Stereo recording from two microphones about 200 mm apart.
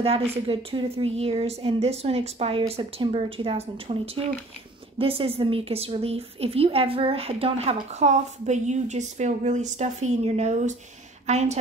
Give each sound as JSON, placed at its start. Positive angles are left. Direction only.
{"t": 0.0, "sound": "a woman's voice", "side_deg": -30}